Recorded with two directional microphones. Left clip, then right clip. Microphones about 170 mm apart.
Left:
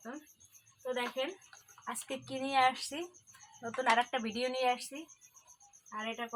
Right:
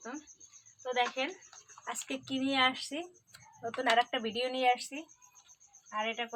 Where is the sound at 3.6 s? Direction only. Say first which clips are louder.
Right 1 dB; 20° right (ahead or behind).